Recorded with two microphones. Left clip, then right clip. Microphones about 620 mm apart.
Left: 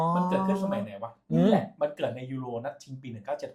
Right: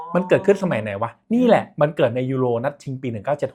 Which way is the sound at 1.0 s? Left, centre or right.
Right.